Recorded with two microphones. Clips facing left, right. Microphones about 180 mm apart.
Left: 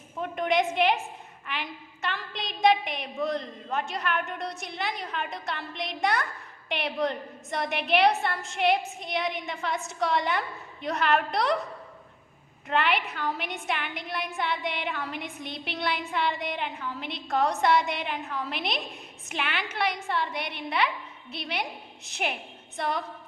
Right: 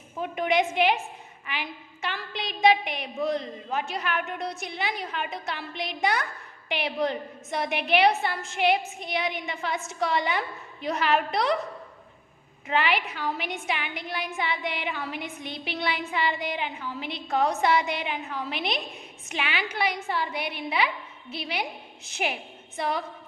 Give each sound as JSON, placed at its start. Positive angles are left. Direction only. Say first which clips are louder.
{"t": 0.2, "sound": "a woman's voice", "louder": "right 1 dB", "side_deg": -5}
{"t": 12.6, "sound": "a woman's voice", "louder": "right 1 dB", "side_deg": 0}